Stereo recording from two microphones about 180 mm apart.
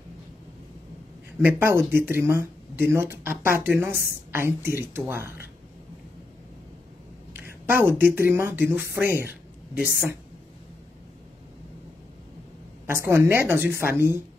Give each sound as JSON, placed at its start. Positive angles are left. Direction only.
{"t": 1.4, "sound": "speech", "side_deg": -10}
{"t": 7.3, "sound": "speech", "side_deg": -10}
{"t": 12.8, "sound": "speech", "side_deg": -15}